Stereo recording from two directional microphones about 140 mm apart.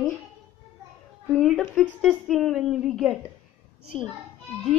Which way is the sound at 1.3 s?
Centre (ahead or behind).